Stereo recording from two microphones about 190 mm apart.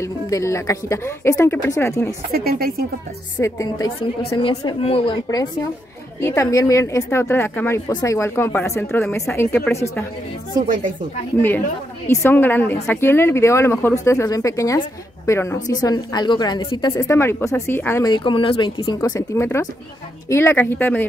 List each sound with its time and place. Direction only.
0.0 s speech: 15° left (ahead or behind)
2.3 s speech: 50° right (ahead or behind)
3.4 s a woman's voice: 20° left (ahead or behind)
12.1 s a woman's voice: 10° left (ahead or behind)
18.9 s speech: 15° left (ahead or behind)